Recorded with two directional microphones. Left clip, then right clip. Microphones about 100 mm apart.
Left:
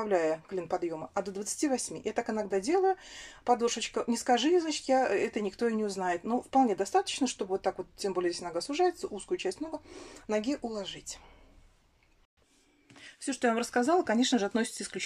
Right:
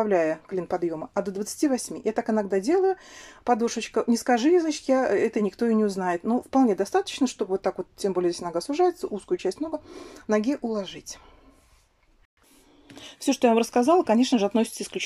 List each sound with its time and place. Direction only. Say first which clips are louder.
0.0 s a woman's voice: right 6 dB; 25° right (ahead or behind)
13.0 s a woman's voice: right 8 dB; 40° right (ahead or behind); by 15.0 s 20° right (ahead or behind)